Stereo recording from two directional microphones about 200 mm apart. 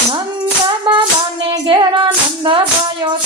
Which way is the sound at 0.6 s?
25° right (ahead or behind).